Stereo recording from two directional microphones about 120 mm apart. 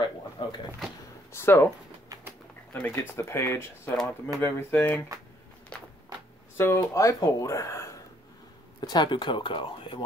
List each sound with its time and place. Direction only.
0.0 s a sound: 40° left (ahead or behind)
1.3 s speech: 20° left (ahead or behind)
2.7 s speech: 15° left (ahead or behind)
6.5 s speech: 20° left (ahead or behind)
8.8 s speech: 40° left (ahead or behind)